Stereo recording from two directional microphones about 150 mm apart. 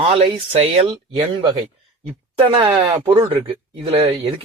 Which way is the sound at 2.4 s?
35° right (ahead or behind).